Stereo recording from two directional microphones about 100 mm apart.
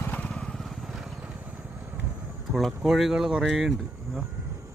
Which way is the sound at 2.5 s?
Centre (ahead or behind).